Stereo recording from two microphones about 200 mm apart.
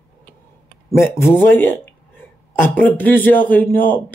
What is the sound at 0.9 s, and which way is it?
Speech, 15° left (ahead or behind).